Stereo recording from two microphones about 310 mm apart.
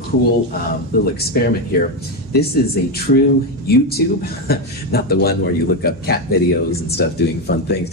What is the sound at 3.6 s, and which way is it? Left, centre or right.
Speech, left.